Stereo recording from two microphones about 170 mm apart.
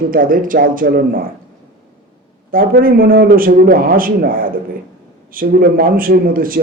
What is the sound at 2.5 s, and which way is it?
Speech, 55° right (ahead or behind).